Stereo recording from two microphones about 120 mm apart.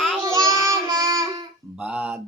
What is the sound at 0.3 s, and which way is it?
Child singing, 30° right (ahead or behind).